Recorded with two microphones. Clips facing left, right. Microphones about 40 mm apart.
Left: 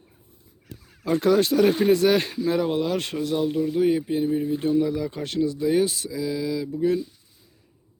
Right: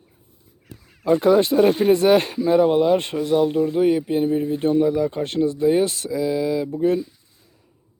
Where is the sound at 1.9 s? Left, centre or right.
Right.